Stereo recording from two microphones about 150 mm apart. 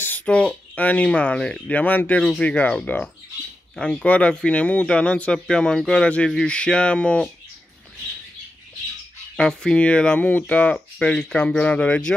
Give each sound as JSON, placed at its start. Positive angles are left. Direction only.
{"t": 0.0, "sound": "speech", "side_deg": 10}
{"t": 9.4, "sound": "speech", "side_deg": 5}